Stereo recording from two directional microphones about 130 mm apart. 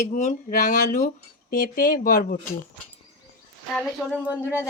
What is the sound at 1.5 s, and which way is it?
Speech, 90° left.